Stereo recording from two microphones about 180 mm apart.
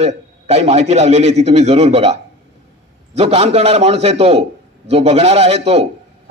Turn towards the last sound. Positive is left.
turn(degrees=-35)  # may be behind; listen again after turning